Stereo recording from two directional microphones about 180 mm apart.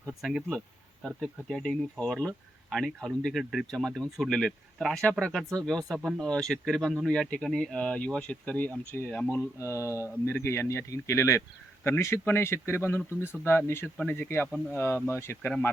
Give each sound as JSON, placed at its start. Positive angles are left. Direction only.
{"t": 0.1, "sound": "speech", "side_deg": 0}